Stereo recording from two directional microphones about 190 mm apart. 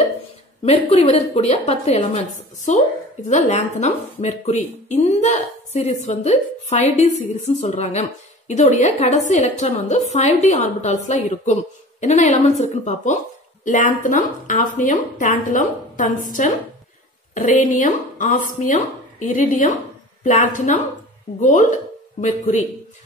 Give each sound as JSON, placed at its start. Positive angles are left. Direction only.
{"t": 0.7, "sound": "speech", "side_deg": 35}